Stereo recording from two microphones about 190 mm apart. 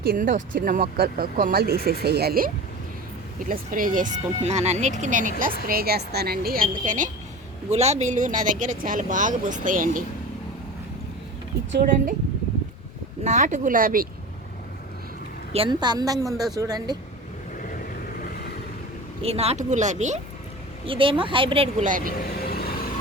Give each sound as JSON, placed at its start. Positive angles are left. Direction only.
{"t": 0.0, "sound": "speech", "side_deg": -50}
{"t": 3.5, "sound": "speech", "side_deg": -45}
{"t": 5.6, "sound": "speech", "side_deg": -55}
{"t": 13.2, "sound": "speech", "side_deg": -40}
{"t": 15.5, "sound": "speech", "side_deg": -25}
{"t": 19.2, "sound": "speech", "side_deg": -30}
{"t": 20.8, "sound": "speech", "side_deg": -25}
{"t": 21.8, "sound": "speech", "side_deg": -45}
{"t": 22.2, "sound": "vehicle", "side_deg": 50}